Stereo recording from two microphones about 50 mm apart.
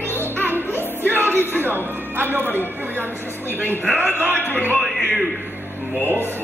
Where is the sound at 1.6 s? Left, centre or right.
Right.